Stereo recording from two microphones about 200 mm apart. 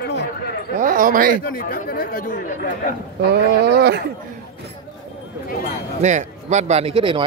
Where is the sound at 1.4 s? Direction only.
45° left (ahead or behind).